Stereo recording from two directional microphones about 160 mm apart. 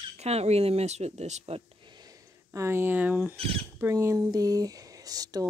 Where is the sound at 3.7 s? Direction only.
15° right (ahead or behind).